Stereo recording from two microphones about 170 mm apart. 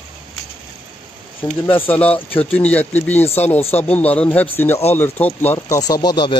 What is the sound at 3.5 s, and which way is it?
Speech, 35° left (ahead or behind).